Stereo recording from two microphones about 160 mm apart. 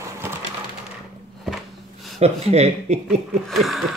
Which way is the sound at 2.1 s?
40° right (ahead or behind).